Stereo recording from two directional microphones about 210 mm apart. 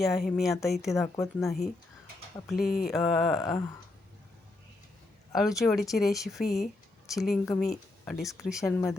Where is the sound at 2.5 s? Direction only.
45° left (ahead or behind).